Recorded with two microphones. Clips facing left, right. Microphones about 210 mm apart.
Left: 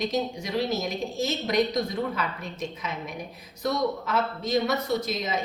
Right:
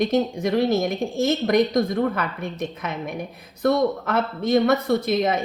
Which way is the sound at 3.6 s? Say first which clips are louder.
Right 7 dB; 55° right (ahead or behind).